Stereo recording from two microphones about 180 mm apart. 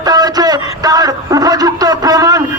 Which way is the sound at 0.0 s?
20° right (ahead or behind).